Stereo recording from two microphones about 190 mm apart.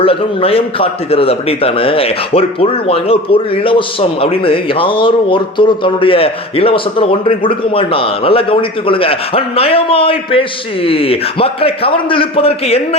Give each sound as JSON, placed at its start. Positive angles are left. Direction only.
{"t": 0.0, "sound": "a man's voice", "side_deg": 30}